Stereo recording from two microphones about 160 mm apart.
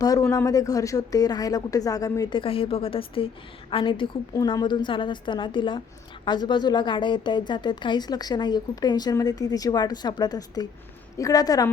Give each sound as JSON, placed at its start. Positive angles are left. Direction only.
{"t": 0.0, "sound": "a woman's voice", "side_deg": 20}